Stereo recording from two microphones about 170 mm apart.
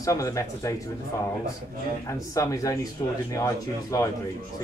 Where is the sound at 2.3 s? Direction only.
20° left (ahead or behind).